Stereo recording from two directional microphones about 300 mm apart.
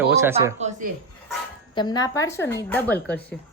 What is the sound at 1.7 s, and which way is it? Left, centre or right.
A woman's voice, centre.